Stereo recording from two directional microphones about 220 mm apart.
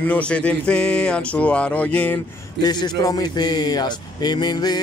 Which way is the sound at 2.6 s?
20° left (ahead or behind).